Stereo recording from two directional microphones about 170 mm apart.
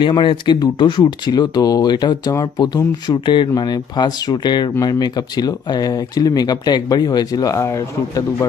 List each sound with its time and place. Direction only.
0.0 s speech: 30° left (ahead or behind)